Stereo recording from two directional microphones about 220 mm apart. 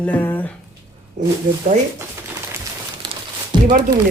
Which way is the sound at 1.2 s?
30° right (ahead or behind).